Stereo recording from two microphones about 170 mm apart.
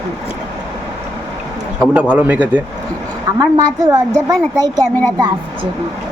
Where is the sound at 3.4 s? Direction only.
25° right (ahead or behind).